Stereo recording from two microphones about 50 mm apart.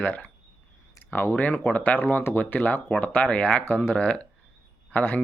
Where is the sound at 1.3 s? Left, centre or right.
Left.